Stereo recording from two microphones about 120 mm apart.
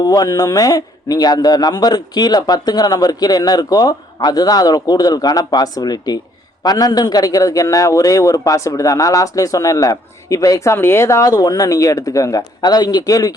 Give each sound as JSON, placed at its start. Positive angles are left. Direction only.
{"t": 0.0, "sound": "a man's voice", "side_deg": 30}